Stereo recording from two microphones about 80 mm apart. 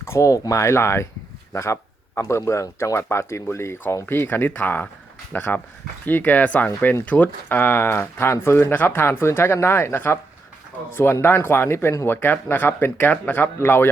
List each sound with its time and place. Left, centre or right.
0.0 s speech: left
6.7 s speech: left
7.0 s speech: centre